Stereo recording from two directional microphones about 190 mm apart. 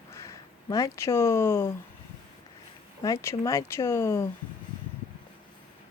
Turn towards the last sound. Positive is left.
turn(degrees=15)  # may be behind; listen again after turning